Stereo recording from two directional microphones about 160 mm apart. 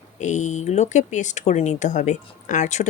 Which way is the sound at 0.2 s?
50° left (ahead or behind).